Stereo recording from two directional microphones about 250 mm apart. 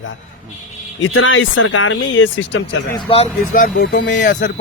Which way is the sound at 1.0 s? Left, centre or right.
Left.